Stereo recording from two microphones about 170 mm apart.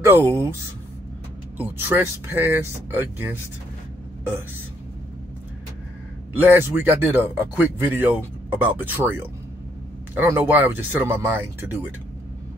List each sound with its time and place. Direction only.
0.0 s speech: 15° right (ahead or behind)
1.6 s speech: 10° right (ahead or behind)
6.3 s speech: 10° right (ahead or behind)